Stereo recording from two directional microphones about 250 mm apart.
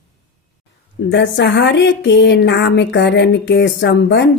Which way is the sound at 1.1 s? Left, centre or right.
Left.